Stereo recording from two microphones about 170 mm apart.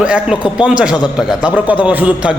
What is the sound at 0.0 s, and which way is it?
A man's voice, 5° right (ahead or behind).